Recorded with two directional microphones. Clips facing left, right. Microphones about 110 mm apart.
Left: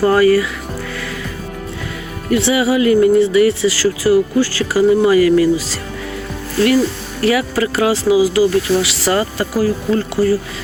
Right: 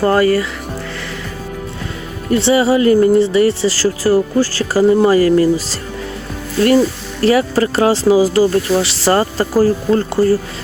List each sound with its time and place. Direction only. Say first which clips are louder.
0.0 s speech: left 1 dB; 30° right (ahead or behind)
2.3 s speech: right 2 dB; 30° right (ahead or behind)
7.2 s speech: right 3 dB; 30° right (ahead or behind)